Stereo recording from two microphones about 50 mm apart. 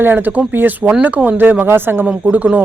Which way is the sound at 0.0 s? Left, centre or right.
Right.